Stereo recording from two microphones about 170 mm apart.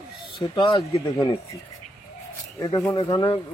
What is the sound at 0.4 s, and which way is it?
Speech, 30° left (ahead or behind).